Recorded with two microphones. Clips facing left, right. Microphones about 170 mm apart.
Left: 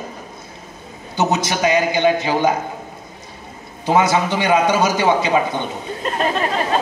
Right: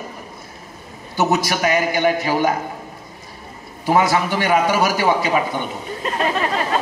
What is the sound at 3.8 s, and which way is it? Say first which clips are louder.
A man's voice: left 1 dB; 20° left (ahead or behind).